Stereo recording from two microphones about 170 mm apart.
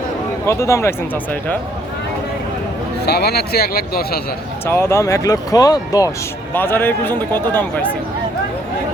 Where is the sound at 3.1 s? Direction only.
70° left (ahead or behind).